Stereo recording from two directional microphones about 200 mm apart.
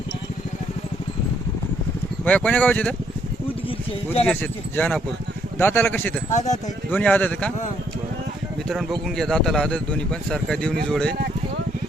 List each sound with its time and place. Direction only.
2.2 s speech: 10° left (ahead or behind)
4.3 s speech: 5° left (ahead or behind)
6.3 s speech: 35° left (ahead or behind)
6.9 s speech: 10° left (ahead or behind)
8.6 s speech: centre (ahead or behind)